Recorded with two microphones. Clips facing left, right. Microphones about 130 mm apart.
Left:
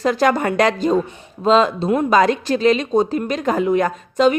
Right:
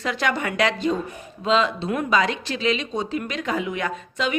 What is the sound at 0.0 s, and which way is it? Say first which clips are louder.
A woman's voice: left 8 dB; 40° left (ahead or behind).